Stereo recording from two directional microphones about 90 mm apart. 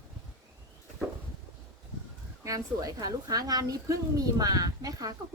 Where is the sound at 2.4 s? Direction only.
40° right (ahead or behind).